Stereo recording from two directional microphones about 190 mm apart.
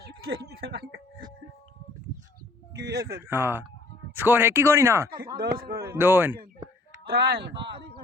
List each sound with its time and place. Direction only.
0.6 s speech: 55° right (ahead or behind)
2.7 s speech: 60° right (ahead or behind)
3.1 s speech: 15° right (ahead or behind)
5.4 s a man's voice: 50° right (ahead or behind)
5.9 s speech: 10° right (ahead or behind)
7.1 s speech: 55° right (ahead or behind)
7.5 s speech: 25° right (ahead or behind)